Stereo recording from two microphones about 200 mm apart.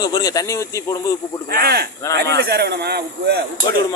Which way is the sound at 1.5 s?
50° right (ahead or behind).